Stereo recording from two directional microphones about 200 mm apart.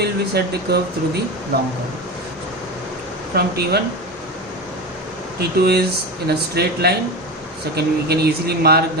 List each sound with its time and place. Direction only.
0.3 s speech: 55° right (ahead or behind)
3.3 s speech: 50° right (ahead or behind)
5.4 s speech: 55° right (ahead or behind)